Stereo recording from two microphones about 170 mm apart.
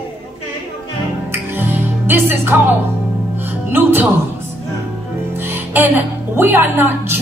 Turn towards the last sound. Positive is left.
turn(degrees=-15)  # may be behind; listen again after turning